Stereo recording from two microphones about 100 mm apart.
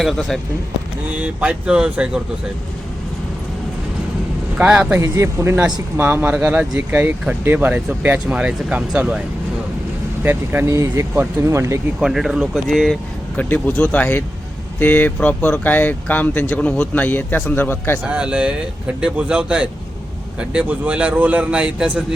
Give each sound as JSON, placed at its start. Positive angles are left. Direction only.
{"t": 0.0, "sound": "speech", "side_deg": 0}
{"t": 1.1, "sound": "speech", "side_deg": -10}
{"t": 4.5, "sound": "speech", "side_deg": -15}
{"t": 4.9, "sound": "speech", "side_deg": -30}
{"t": 10.2, "sound": "speech", "side_deg": -20}
{"t": 11.9, "sound": "speech", "side_deg": -5}
{"t": 13.3, "sound": "speech", "side_deg": 15}
{"t": 18.0, "sound": "speech", "side_deg": -10}